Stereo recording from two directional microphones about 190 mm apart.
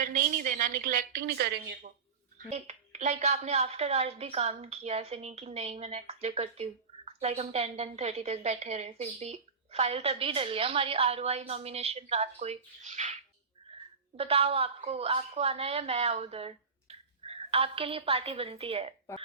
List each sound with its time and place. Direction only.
0.0 s a woman's voice: 45° right (ahead or behind)
2.5 s a woman's voice: 35° right (ahead or behind)
14.2 s a woman's voice: 30° right (ahead or behind)